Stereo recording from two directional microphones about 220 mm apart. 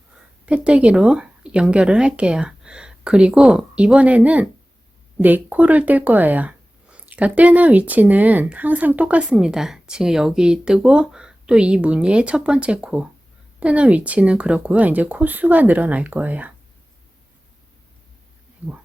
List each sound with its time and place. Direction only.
0.4 s speech: 5° right (ahead or behind)